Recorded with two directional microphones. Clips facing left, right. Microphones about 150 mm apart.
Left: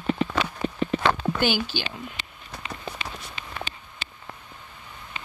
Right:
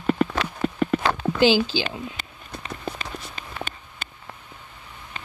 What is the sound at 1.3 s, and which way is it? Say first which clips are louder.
Speech: right 6 dB; 90° right.